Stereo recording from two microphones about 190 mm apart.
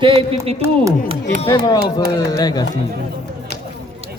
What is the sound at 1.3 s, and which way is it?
Speech, 25° left (ahead or behind).